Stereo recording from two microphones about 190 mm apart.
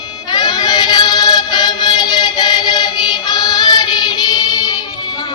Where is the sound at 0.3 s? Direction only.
20° left (ahead or behind).